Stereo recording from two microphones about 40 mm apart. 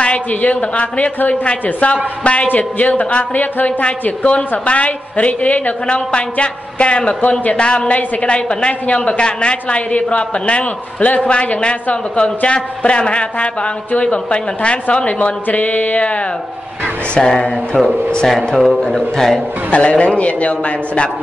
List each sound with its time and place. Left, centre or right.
0.3 s a man's voice: left
2.4 s a man's voice: left
5.9 s a woman's voice: left
7.2 s a man's voice: left
7.5 s a woman's voice: left
17.2 s a woman's voice: centre
18.2 s speech: centre
18.8 s speech: centre
19.7 s a man's voice: left